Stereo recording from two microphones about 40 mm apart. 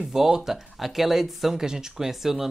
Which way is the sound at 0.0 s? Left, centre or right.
Centre.